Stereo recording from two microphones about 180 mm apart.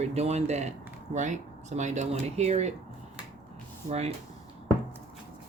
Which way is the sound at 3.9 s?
35° right (ahead or behind).